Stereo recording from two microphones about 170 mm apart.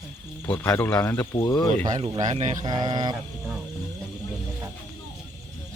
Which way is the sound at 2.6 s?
25° right (ahead or behind).